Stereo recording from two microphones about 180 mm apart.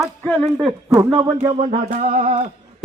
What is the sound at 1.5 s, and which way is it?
Speech, 40° right (ahead or behind).